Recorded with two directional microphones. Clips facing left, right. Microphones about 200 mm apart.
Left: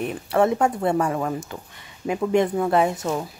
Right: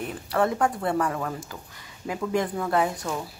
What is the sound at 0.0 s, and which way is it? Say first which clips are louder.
A woman's voice: left 5 dB; 20° left (ahead or behind).